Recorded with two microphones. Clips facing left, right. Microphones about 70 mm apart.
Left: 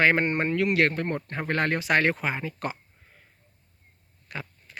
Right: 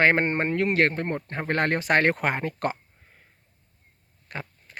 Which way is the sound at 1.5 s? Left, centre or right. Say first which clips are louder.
Right 2 dB; right.